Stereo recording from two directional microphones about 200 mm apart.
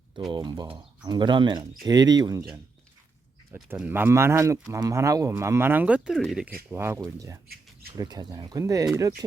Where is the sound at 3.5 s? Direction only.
10° right (ahead or behind).